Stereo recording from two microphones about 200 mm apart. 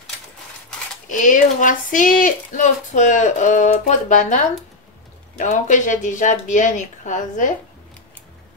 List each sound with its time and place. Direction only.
1.0 s speech: 40° left (ahead or behind)